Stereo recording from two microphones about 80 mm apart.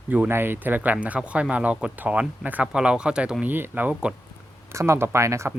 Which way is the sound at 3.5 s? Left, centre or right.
Right.